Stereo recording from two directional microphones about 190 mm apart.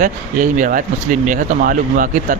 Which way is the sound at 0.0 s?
45° right (ahead or behind).